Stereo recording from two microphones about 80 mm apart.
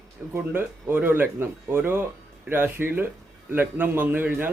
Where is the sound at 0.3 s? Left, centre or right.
Right.